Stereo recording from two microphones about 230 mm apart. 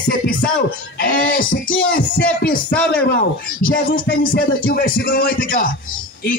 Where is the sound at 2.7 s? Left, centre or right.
Centre.